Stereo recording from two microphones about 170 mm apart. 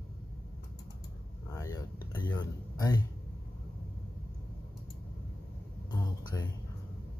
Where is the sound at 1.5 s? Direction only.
20° left (ahead or behind).